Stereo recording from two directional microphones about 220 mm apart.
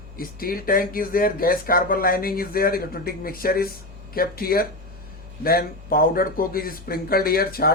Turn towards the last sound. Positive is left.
turn(degrees=45)  # may be behind; listen again after turning